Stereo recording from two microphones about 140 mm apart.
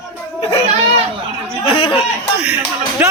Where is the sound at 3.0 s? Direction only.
10° right (ahead or behind).